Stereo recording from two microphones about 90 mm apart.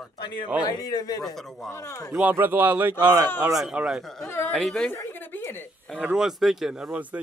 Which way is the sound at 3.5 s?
5° right (ahead or behind).